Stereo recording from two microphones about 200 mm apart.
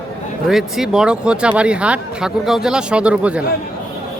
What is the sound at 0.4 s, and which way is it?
Speech, centre (ahead or behind).